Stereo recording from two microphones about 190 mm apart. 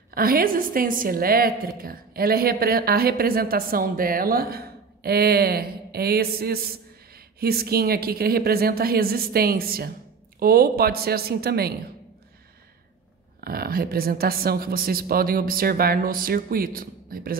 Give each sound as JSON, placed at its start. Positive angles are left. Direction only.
{"t": 0.1, "sound": "a woman's voice", "side_deg": -50}
{"t": 13.4, "sound": "a woman's voice", "side_deg": -50}